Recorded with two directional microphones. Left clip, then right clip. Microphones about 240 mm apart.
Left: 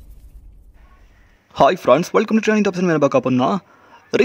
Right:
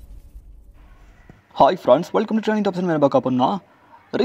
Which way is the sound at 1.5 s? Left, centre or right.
Centre.